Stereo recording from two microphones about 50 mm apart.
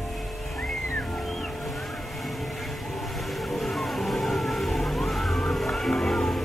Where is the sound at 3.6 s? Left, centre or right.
Centre.